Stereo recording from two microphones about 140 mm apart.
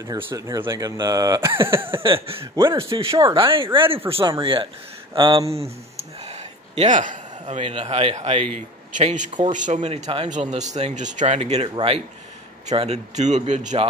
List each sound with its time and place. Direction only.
0.0 s speech: 25° right (ahead or behind)
1.8 s speech: 40° right (ahead or behind)
2.4 s speech: 20° right (ahead or behind)
2.9 s speech: 35° right (ahead or behind); by 9.8 s 65° right (ahead or behind)
9.8 s speech: 50° right (ahead or behind)